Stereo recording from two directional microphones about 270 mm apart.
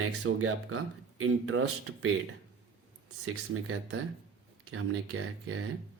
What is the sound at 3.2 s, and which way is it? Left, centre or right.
Speech, right.